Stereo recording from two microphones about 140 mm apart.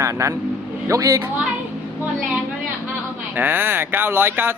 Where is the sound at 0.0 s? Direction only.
20° right (ahead or behind).